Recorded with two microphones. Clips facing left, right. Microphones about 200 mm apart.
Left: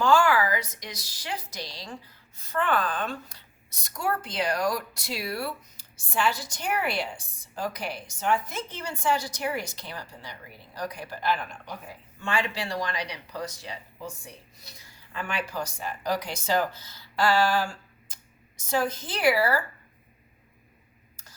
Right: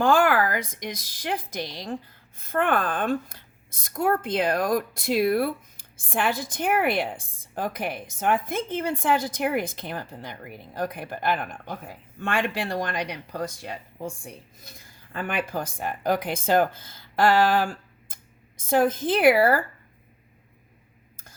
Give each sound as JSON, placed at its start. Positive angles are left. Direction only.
{"t": 0.0, "sound": "a woman's voice", "side_deg": -55}